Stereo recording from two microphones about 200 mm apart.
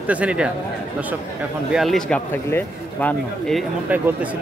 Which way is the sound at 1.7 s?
Centre (ahead or behind).